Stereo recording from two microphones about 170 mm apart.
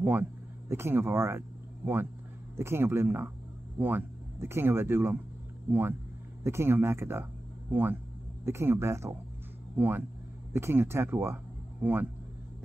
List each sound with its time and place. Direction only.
0.0 s speech: 10° right (ahead or behind)
2.5 s speech: 15° right (ahead or behind)